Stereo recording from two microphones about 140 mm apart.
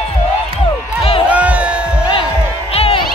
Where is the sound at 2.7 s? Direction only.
45° left (ahead or behind).